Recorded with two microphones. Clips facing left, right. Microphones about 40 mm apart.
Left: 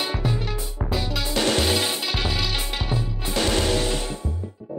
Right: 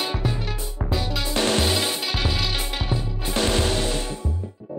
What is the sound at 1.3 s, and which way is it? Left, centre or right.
Music, right.